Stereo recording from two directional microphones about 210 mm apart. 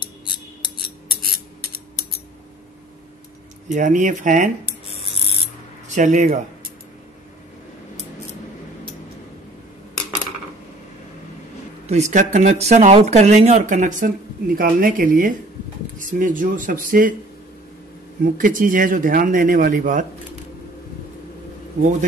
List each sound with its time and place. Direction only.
3.6 s speech: 35° right (ahead or behind)
5.9 s speech: 35° right (ahead or behind)
11.9 s speech: 35° right (ahead or behind)
18.2 s speech: 40° right (ahead or behind)